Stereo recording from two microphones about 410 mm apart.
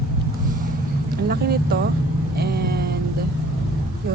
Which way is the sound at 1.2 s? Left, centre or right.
Right.